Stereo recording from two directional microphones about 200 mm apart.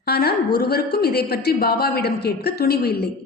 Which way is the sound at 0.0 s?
50° left (ahead or behind).